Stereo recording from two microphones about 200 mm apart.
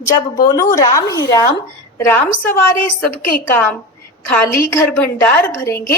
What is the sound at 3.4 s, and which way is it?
A woman's voice, 10° left (ahead or behind).